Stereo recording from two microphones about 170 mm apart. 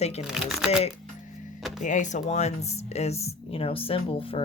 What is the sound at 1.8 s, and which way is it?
Speech, 45° left (ahead or behind).